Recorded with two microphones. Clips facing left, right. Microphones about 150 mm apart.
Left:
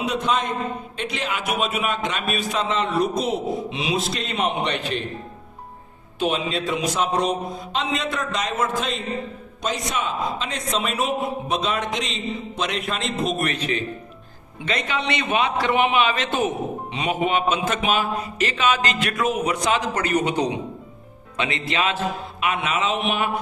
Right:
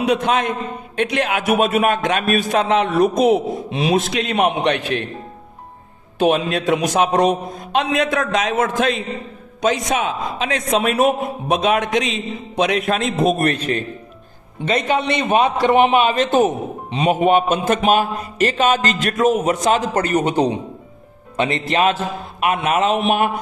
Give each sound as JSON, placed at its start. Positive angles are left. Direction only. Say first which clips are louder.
{"t": 0.0, "sound": "a man's voice", "louder": "right 5 dB", "side_deg": -70}
{"t": 1.5, "sound": "a man's voice", "louder": "right 9 dB", "side_deg": -50}
{"t": 4.1, "sound": "a man's voice", "louder": "right 6 dB", "side_deg": -70}
{"t": 6.1, "sound": "a man's voice", "louder": "right 7 dB", "side_deg": -65}